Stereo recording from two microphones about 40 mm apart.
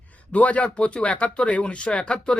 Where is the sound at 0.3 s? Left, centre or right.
Left.